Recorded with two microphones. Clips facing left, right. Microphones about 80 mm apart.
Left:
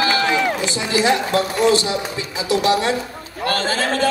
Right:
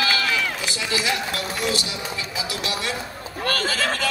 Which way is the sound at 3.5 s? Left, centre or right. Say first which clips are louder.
Left 4 dB; left.